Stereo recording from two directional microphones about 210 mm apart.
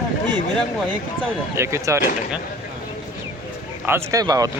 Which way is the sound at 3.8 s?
15° right (ahead or behind).